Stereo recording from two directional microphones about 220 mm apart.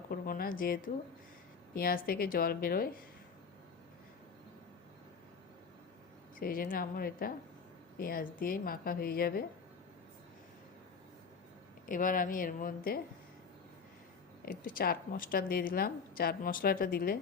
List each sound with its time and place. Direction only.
0.1 s a woman's voice: 40° left (ahead or behind)
6.4 s a woman's voice: 40° left (ahead or behind)
11.9 s a woman's voice: 40° left (ahead or behind)
14.4 s a woman's voice: 40° left (ahead or behind)